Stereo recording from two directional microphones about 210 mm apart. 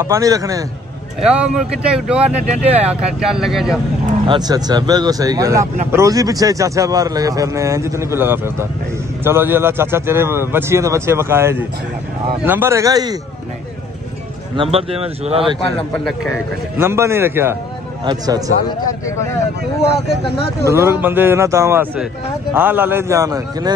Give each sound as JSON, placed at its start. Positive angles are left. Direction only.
{"t": 0.0, "sound": "a man's voice", "side_deg": -15}
{"t": 1.2, "sound": "speech", "side_deg": -5}
{"t": 4.3, "sound": "a man's voice", "side_deg": -20}
{"t": 14.6, "sound": "speech", "side_deg": -25}
{"t": 15.9, "sound": "speech", "side_deg": 0}
{"t": 16.7, "sound": "a man's voice", "side_deg": -10}
{"t": 18.9, "sound": "speech", "side_deg": 15}
{"t": 20.6, "sound": "a man's voice", "side_deg": -10}